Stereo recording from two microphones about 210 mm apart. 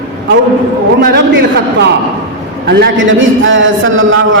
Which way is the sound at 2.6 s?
50° right (ahead or behind).